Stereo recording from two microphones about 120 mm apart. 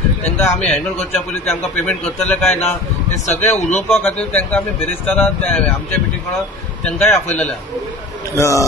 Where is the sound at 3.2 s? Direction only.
70° left (ahead or behind).